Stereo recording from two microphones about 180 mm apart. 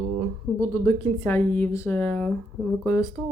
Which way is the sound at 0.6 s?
15° left (ahead or behind).